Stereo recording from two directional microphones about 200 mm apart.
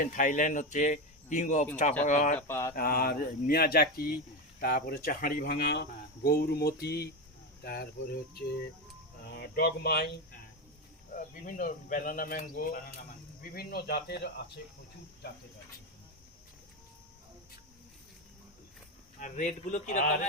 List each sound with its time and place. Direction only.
0.0 s speech: 40° left (ahead or behind)
2.5 s mantra: 15° left (ahead or behind)
2.7 s speech: 50° left (ahead or behind)
9.2 s speech: 55° left (ahead or behind)
11.1 s speech: 40° left (ahead or behind)
19.2 s speech: 40° left (ahead or behind)